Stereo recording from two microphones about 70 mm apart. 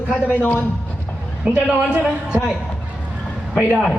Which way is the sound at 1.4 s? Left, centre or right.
Centre.